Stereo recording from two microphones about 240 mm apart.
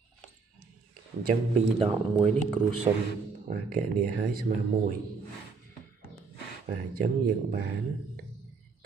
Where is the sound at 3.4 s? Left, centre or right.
Right.